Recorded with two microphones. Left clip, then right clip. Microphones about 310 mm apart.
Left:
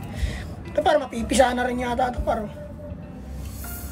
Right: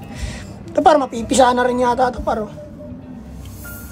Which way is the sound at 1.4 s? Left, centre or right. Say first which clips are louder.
Right 7 dB; right.